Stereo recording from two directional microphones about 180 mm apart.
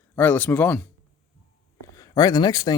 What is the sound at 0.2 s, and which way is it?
Speech, 10° left (ahead or behind).